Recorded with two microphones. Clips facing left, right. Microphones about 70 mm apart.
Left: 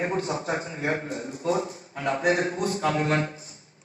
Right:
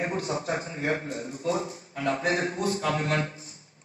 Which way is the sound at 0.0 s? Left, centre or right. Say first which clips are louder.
Left 2 dB; left.